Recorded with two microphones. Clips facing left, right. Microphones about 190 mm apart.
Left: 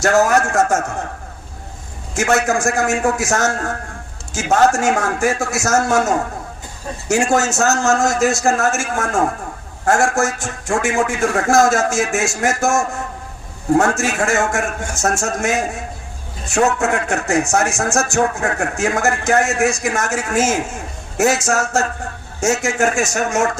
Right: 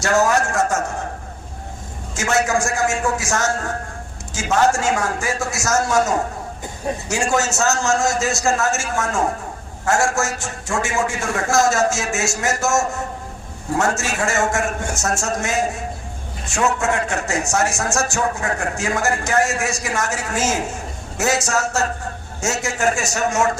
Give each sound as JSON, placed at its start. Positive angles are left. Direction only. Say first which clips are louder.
{"t": 0.2, "sound": "a man's voice", "louder": "left 3 dB", "side_deg": 50}
{"t": 2.1, "sound": "speech", "louder": "left 3 dB", "side_deg": 60}
{"t": 3.2, "sound": "a man's voice", "louder": "left 3 dB", "side_deg": 45}
{"t": 4.7, "sound": "a man's voice", "louder": "left 3 dB", "side_deg": 50}
{"t": 16.8, "sound": "a man's voice", "louder": "left 2 dB", "side_deg": 60}